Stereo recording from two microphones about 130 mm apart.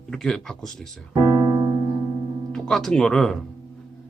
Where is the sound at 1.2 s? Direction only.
30° right (ahead or behind).